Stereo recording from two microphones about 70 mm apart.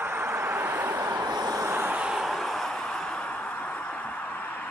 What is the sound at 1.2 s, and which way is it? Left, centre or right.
Vehicle, right.